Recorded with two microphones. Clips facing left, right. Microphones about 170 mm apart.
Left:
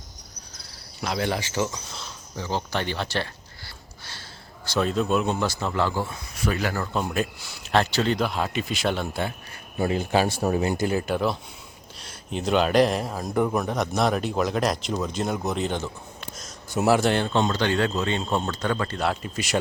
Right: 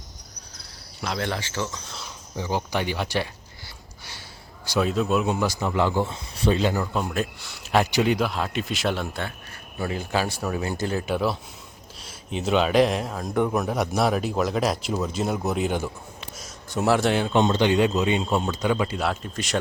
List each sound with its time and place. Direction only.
1.0 s speech: 5° left (ahead or behind)
2.0 s speech: 15° right (ahead or behind)
4.6 s a man's voice: 10° right (ahead or behind)
6.8 s a man's voice: centre (ahead or behind)
7.7 s a man's voice: 15° right (ahead or behind)
8.2 s a man's voice: centre (ahead or behind)
9.7 s speech: 25° left (ahead or behind)
10.7 s speech: 10° left (ahead or behind)
11.0 s a man's voice: centre (ahead or behind)
16.7 s a man's voice: 5° left (ahead or behind)
17.3 s a man's voice: 20° right (ahead or behind); by 19.5 s 5° left (ahead or behind)